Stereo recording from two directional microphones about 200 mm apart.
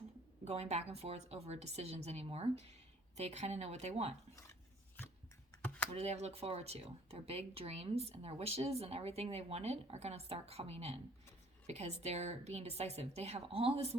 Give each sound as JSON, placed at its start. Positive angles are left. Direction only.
{"t": 0.4, "sound": "speech", "side_deg": -30}
{"t": 5.6, "sound": "computer keyboard", "side_deg": 5}
{"t": 5.9, "sound": "speech", "side_deg": -30}